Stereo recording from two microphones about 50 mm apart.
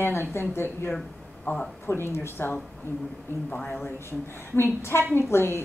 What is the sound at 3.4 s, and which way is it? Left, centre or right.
Speech, left.